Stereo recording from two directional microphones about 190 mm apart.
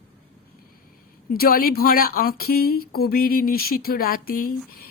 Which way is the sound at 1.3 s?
50° left (ahead or behind).